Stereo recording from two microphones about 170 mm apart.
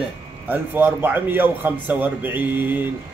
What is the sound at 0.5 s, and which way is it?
A man's voice, 10° right (ahead or behind).